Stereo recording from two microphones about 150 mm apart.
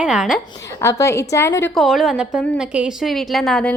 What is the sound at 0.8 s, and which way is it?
Speech, 20° left (ahead or behind).